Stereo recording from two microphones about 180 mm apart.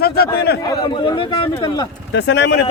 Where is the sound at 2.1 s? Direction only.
75° left (ahead or behind).